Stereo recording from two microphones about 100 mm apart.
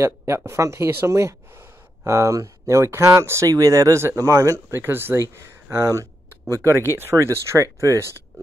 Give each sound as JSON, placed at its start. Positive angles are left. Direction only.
{"t": 0.0, "sound": "speech", "side_deg": -25}